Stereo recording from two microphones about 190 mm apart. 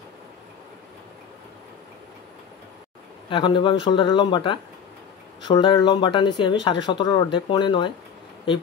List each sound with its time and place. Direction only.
3.3 s speech: 25° left (ahead or behind)